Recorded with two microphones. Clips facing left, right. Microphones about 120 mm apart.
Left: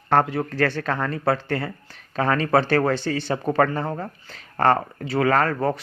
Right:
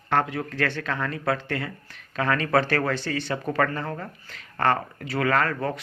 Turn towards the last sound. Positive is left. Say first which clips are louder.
# left 4 dB
turn(degrees=35)  # may be behind; listen again after turning